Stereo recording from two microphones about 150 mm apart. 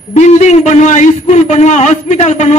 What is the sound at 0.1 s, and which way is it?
A man's voice, 50° left (ahead or behind).